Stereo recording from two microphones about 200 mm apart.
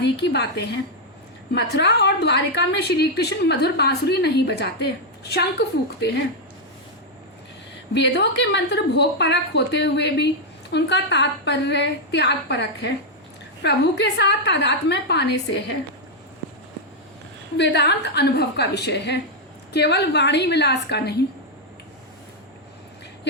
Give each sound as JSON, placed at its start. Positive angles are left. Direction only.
{"t": 0.0, "sound": "a woman's voice", "side_deg": 60}
{"t": 7.9, "sound": "a woman's voice", "side_deg": 60}
{"t": 17.6, "sound": "a woman's voice", "side_deg": 60}